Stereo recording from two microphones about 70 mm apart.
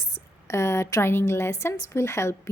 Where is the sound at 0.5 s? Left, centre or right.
Left.